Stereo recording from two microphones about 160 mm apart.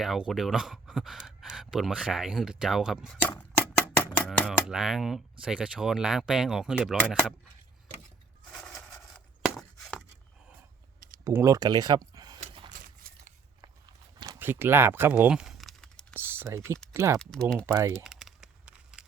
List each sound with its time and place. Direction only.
0.0 s speech: centre (ahead or behind)
8.5 s a sound: 5° left (ahead or behind)
11.2 s speech: 20° right (ahead or behind)
12.4 s gasp: 30° right (ahead or behind)
13.6 s walk: 30° right (ahead or behind)
14.3 s crumpling: 15° right (ahead or behind)
16.1 s typing: 15° right (ahead or behind)
16.9 s speech: 20° right (ahead or behind)
17.2 s speech: 5° left (ahead or behind)
17.7 s speech: 20° right (ahead or behind)
18.0 s a sound: centre (ahead or behind)